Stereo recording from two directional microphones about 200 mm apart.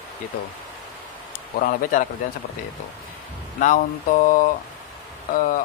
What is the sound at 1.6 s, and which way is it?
Speech, 45° left (ahead or behind).